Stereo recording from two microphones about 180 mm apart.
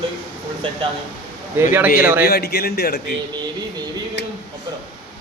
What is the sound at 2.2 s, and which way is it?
Speech, 60° left (ahead or behind).